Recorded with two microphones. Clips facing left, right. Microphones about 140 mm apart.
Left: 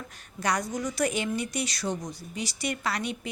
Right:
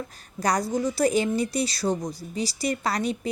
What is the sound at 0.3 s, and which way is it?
A woman's voice, 35° right (ahead or behind).